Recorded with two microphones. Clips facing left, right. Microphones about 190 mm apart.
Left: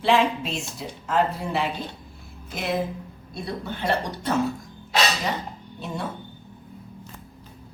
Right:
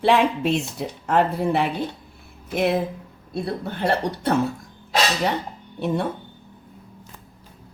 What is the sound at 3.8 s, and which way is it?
Speech, 60° right (ahead or behind).